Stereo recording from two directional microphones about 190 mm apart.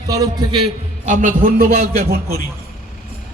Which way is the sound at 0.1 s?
25° right (ahead or behind).